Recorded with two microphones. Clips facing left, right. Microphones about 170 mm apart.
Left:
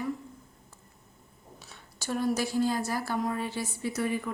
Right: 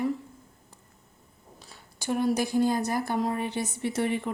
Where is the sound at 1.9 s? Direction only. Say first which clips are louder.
Right 3 dB; 15° right (ahead or behind).